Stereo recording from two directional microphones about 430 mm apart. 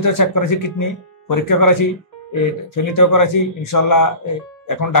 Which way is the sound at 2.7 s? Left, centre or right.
Left.